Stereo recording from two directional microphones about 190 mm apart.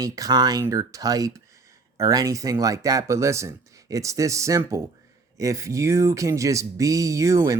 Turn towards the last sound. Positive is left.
turn(degrees=-15)  # may be behind; listen again after turning